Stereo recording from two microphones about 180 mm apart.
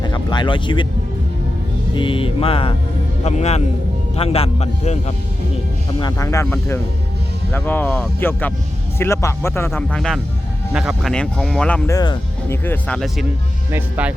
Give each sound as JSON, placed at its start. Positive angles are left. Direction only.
{"t": 0.0, "sound": "speech", "side_deg": 25}
{"t": 2.0, "sound": "music", "side_deg": 30}
{"t": 3.2, "sound": "speech", "side_deg": 40}
{"t": 6.0, "sound": "speech", "side_deg": 20}
{"t": 11.9, "sound": "speech", "side_deg": 20}
{"t": 13.7, "sound": "speech", "side_deg": -10}